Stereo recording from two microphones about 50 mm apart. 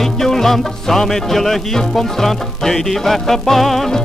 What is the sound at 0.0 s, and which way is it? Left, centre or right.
Music, centre.